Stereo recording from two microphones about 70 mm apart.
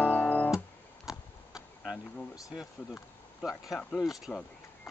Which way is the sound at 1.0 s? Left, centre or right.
Centre.